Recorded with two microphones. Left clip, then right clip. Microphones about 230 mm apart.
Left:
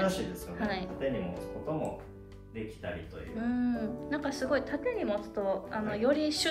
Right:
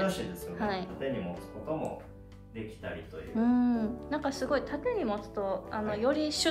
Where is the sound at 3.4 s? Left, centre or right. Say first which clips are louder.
Right 4 dB; centre.